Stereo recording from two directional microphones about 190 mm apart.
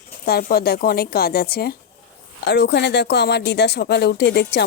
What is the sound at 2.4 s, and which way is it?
Speech, 65° left (ahead or behind).